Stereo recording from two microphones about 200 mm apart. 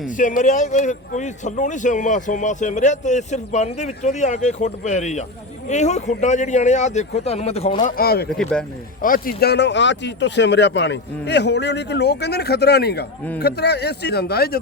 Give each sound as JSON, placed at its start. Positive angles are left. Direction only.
{"t": 0.2, "sound": "speech", "side_deg": 40}
{"t": 8.3, "sound": "speech", "side_deg": 5}
{"t": 9.0, "sound": "speech", "side_deg": 45}